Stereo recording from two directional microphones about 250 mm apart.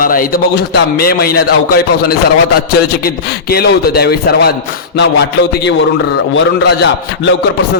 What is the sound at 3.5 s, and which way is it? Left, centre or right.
A man's voice, left.